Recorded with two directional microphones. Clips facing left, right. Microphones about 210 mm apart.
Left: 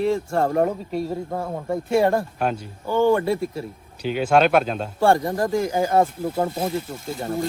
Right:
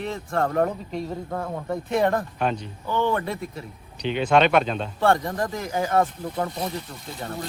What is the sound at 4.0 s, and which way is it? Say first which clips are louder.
Speech: left 1 dB; 5° left (ahead or behind).